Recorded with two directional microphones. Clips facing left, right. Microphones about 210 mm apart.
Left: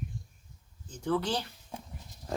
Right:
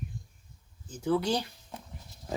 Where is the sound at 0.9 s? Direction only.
10° right (ahead or behind).